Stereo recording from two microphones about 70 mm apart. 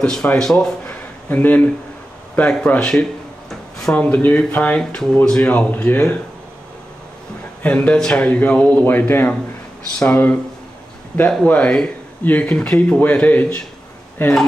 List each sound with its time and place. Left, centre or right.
0.0 s speech: centre
0.8 s a sound: left
2.3 s speech: left
3.4 s a sound: centre
3.9 s speech: left
7.6 s speech: left
11.4 s speech: centre
14.2 s speech: left